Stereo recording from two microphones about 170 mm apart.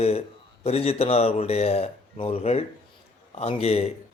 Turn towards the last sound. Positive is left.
turn(degrees=35)  # may be behind; listen again after turning